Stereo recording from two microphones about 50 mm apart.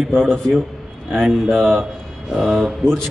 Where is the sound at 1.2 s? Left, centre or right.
Centre.